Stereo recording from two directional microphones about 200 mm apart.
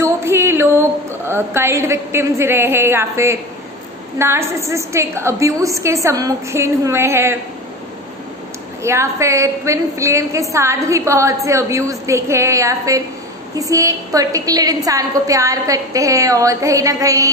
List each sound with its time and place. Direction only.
0.0 s music: 10° right (ahead or behind)
1.2 s a woman's voice: 10° right (ahead or behind)
8.8 s a woman's voice: 15° right (ahead or behind)